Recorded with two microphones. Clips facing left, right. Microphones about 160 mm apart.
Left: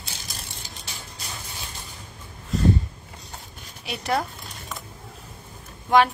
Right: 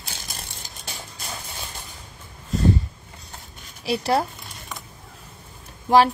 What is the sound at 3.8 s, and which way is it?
Speech, 30° right (ahead or behind).